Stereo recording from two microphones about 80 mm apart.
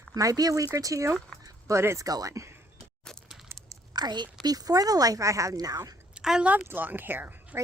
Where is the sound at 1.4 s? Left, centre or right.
Right.